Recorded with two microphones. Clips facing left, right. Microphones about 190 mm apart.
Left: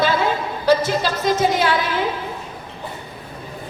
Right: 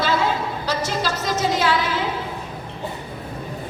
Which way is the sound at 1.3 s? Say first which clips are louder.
Right 1 dB; 55° left (ahead or behind).